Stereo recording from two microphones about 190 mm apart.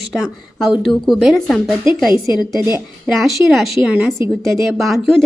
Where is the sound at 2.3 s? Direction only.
20° left (ahead or behind).